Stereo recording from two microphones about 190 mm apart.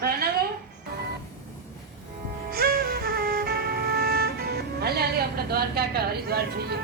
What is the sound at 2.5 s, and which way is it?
Music, 50° right (ahead or behind).